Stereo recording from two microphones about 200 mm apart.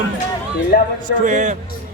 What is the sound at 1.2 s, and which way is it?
Speech, 40° right (ahead or behind).